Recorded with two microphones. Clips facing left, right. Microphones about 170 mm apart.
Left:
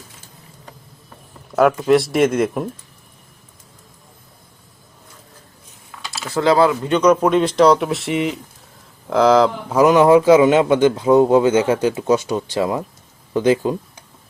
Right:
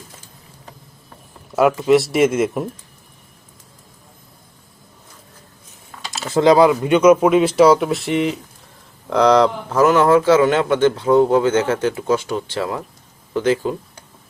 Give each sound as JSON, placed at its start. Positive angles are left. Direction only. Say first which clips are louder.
{"t": 1.5, "sound": "speech", "louder": "even", "side_deg": -5}
{"t": 6.1, "sound": "speech", "louder": "right 3 dB", "side_deg": -20}
{"t": 9.7, "sound": "a man's voice", "louder": "left 2 dB", "side_deg": 15}